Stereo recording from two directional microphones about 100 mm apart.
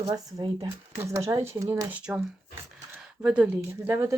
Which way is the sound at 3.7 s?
25° right (ahead or behind).